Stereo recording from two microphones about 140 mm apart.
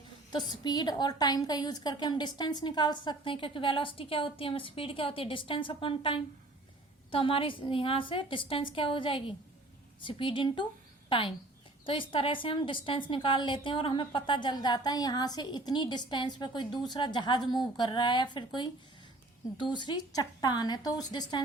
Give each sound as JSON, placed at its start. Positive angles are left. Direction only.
{"t": 0.3, "sound": "a woman's voice", "side_deg": 30}